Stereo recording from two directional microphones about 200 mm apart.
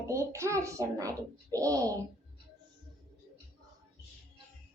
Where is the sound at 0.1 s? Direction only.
15° right (ahead or behind).